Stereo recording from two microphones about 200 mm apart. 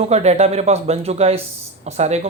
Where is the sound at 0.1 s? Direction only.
30° right (ahead or behind).